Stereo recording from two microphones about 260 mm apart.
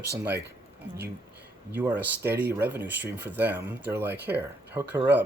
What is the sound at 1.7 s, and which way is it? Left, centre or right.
Speech, centre.